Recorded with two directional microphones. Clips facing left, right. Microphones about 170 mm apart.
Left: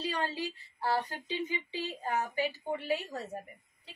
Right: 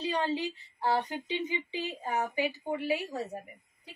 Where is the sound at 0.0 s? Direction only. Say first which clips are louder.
Right 4 dB; 20° right (ahead or behind).